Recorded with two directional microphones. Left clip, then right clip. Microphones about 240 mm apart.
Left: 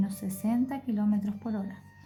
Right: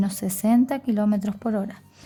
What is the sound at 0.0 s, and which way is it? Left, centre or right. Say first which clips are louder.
A woman's voice: right 8 dB; right.